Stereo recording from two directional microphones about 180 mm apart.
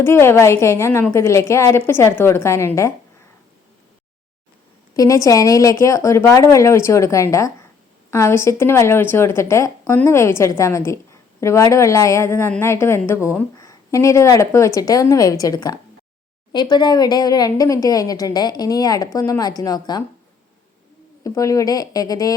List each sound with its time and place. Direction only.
0.0 s a woman's voice: 15° left (ahead or behind)
4.9 s a woman's voice: 15° left (ahead or behind)
21.2 s speech: 20° left (ahead or behind)